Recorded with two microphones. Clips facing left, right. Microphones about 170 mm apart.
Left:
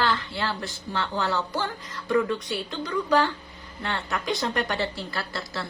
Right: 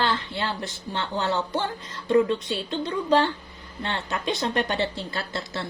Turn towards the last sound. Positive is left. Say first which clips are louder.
# right 1 dB
turn(degrees=-25)  # may be behind; listen again after turning